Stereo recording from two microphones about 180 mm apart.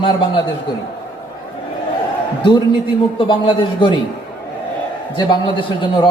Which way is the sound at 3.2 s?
25° left (ahead or behind).